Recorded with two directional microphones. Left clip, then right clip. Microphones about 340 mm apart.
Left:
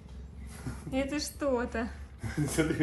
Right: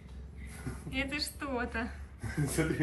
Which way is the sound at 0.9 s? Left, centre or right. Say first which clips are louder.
Left 2 dB; centre.